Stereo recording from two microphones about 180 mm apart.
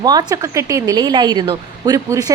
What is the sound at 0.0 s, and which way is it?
A woman's voice, 20° right (ahead or behind).